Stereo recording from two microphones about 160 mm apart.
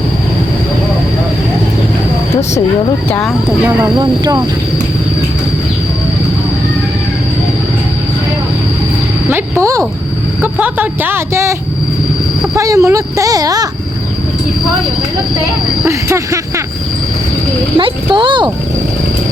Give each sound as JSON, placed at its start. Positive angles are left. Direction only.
{"t": 3.8, "sound": "speech", "side_deg": -25}
{"t": 9.3, "sound": "speech", "side_deg": -20}
{"t": 12.5, "sound": "speech", "side_deg": -20}
{"t": 15.8, "sound": "speech", "side_deg": -20}
{"t": 17.7, "sound": "speech", "side_deg": -30}